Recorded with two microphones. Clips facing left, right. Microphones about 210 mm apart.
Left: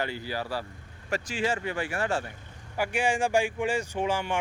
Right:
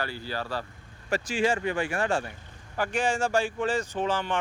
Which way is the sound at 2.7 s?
10° left (ahead or behind).